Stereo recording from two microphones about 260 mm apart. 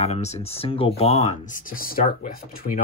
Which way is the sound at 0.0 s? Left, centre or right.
Left.